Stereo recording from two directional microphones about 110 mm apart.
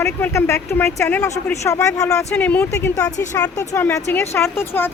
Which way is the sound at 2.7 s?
30° left (ahead or behind).